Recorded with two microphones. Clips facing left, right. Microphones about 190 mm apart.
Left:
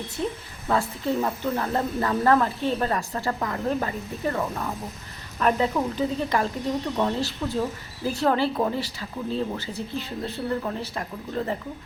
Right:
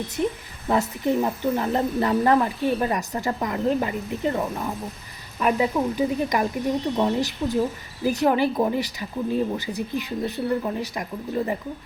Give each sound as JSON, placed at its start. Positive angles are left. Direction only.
{"t": 0.2, "sound": "speech", "side_deg": -15}